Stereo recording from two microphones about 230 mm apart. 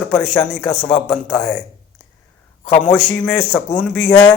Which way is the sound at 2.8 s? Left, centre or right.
Centre.